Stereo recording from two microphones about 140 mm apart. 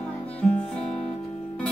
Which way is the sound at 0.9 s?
50° left (ahead or behind).